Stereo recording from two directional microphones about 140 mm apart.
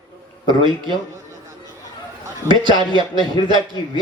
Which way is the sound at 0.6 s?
35° right (ahead or behind).